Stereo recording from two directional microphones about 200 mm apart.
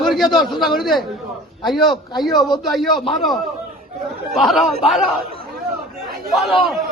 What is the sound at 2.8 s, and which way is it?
Speech, 20° left (ahead or behind).